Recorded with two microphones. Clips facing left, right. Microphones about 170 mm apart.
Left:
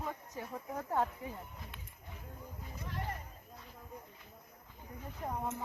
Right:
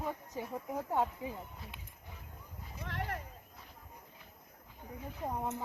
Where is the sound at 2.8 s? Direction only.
80° right.